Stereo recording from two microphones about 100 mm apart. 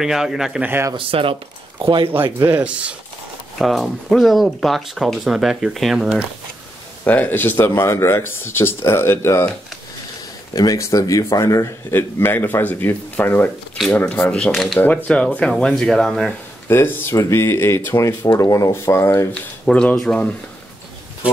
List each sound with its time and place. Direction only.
0.0 s speech: 5° right (ahead or behind)
0.6 s speech: 20° right (ahead or behind)
0.9 s speech: 60° right (ahead or behind)
2.4 s speech: 15° right (ahead or behind)
3.5 s speech: centre (ahead or behind)
7.1 s speech: 15° left (ahead or behind)
10.5 s speech: 35° left (ahead or behind)
11.9 s speech: 20° left (ahead or behind)
14.3 s speech: 5° left (ahead or behind)
16.6 s speech: 25° left (ahead or behind)
19.6 s speech: 10° left (ahead or behind)